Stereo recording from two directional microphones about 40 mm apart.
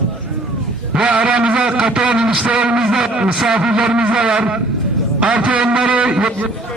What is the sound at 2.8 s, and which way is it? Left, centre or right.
Speech, centre.